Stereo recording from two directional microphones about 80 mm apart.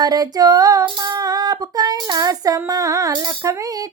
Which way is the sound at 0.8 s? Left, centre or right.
Right.